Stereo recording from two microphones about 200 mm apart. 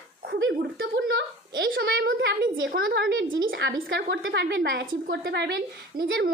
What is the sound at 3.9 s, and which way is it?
A woman's voice, 60° right (ahead or behind).